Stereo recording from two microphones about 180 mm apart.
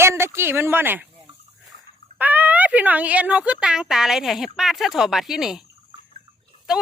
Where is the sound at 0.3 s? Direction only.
15° right (ahead or behind).